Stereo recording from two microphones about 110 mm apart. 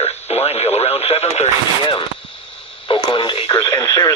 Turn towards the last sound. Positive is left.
turn(degrees=35)  # may be behind; listen again after turning